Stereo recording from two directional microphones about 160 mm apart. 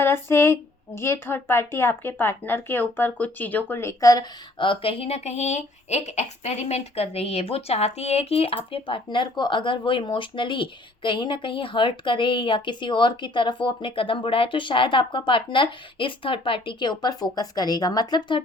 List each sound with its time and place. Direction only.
0.0 s speech: 15° left (ahead or behind)